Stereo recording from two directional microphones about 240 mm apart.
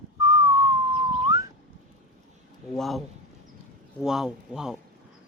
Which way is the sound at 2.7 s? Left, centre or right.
Centre.